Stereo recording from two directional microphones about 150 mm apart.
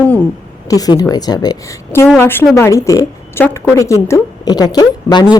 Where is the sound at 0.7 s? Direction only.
25° left (ahead or behind).